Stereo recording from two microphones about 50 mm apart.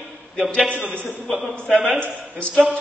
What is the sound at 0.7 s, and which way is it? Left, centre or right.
Speech, right.